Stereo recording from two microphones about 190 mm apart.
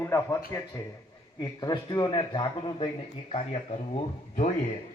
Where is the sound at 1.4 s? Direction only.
20° left (ahead or behind).